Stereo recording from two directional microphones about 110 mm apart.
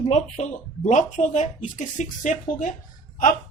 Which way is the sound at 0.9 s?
90° left.